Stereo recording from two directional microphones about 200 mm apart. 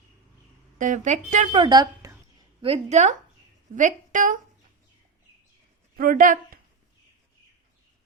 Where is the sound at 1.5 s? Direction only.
20° right (ahead or behind).